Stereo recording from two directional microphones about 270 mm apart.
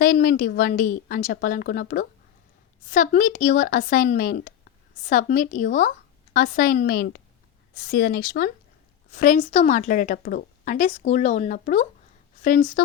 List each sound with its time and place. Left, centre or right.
0.0 s a woman's voice: left